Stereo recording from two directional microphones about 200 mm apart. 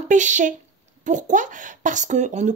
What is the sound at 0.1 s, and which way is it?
Speech, 40° right (ahead or behind).